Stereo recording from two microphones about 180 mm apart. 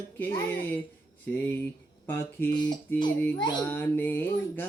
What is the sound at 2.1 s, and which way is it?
Speech, 10° left (ahead or behind).